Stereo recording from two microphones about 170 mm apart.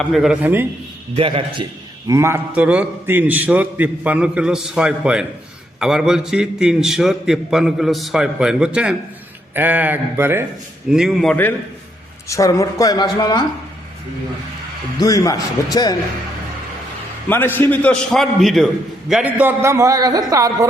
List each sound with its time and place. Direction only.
0.0 s a man's voice: centre (ahead or behind)
1.1 s a man's voice: 30° right (ahead or behind)
2.0 s a man's voice: 15° right (ahead or behind)
10.9 s a man's voice: centre (ahead or behind)
12.3 s a woman's voice: 20° left (ahead or behind)
15.0 s a woman's voice: 20° left (ahead or behind)
17.2 s a man's voice: 10° left (ahead or behind); by 20.7 s 20° right (ahead or behind)